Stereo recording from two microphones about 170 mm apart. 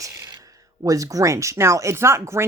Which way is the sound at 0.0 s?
20° right (ahead or behind).